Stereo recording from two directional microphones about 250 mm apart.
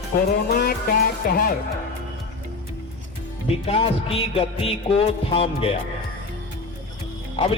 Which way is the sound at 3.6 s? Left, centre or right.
Left.